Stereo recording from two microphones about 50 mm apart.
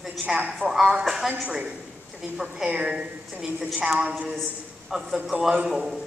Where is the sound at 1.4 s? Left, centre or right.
Centre.